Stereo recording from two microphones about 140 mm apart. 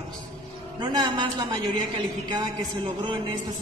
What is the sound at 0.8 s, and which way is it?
Speech, 30° right (ahead or behind).